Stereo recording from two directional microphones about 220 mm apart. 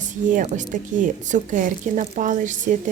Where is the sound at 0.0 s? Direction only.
35° right (ahead or behind).